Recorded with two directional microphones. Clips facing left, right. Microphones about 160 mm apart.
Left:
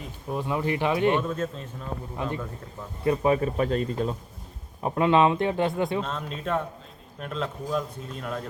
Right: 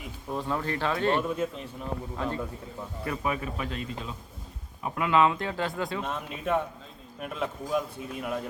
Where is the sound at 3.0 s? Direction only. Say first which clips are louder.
Left 9 dB; 30° left (ahead or behind); by 4.1 s 45° left (ahead or behind).